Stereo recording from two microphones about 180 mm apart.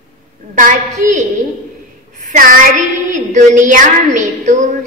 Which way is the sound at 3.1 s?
45° right (ahead or behind).